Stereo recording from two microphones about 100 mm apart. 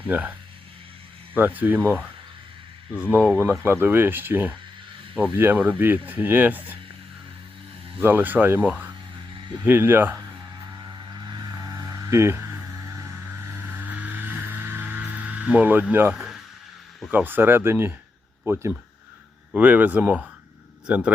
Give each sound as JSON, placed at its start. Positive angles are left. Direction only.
{"t": 0.1, "sound": "speech", "side_deg": -20}
{"t": 1.4, "sound": "speech", "side_deg": -20}
{"t": 8.0, "sound": "speech", "side_deg": -20}
{"t": 9.3, "sound": "vehicle", "side_deg": -50}
{"t": 9.6, "sound": "speech", "side_deg": -20}
{"t": 10.7, "sound": "a sound", "side_deg": -40}
{"t": 13.2, "sound": "vehicle", "side_deg": -20}
{"t": 16.1, "sound": "a sound", "side_deg": 0}
{"t": 17.1, "sound": "a man's voice", "side_deg": -20}